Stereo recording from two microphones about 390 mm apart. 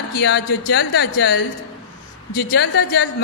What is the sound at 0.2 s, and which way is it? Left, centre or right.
A woman's voice, left.